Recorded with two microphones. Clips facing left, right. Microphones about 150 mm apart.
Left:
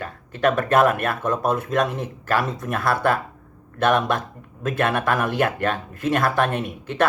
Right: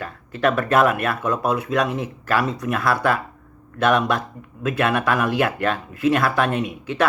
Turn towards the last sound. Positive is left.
turn(degrees=50)  # may be behind; listen again after turning